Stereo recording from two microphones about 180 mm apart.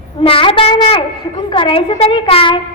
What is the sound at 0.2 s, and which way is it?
A woman's voice, 30° left (ahead or behind).